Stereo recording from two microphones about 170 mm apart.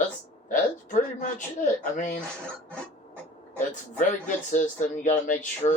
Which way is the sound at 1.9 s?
45° left (ahead or behind).